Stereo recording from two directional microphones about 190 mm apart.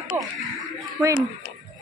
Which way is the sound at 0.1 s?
10° right (ahead or behind).